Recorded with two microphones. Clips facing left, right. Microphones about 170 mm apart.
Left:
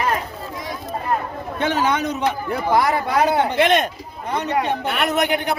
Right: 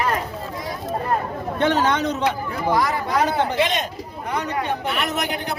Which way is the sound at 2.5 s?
65° left (ahead or behind).